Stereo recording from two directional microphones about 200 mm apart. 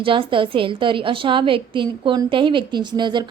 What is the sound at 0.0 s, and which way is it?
A woman's voice, 25° right (ahead or behind).